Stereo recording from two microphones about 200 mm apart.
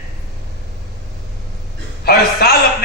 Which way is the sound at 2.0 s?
50° left (ahead or behind).